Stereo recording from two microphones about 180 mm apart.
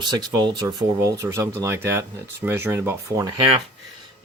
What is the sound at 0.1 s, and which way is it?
Speech, 25° right (ahead or behind).